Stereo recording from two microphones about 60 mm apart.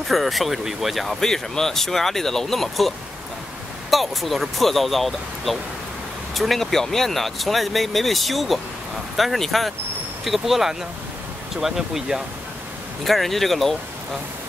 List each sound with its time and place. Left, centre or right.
0.1 s speech: centre
3.9 s speech: centre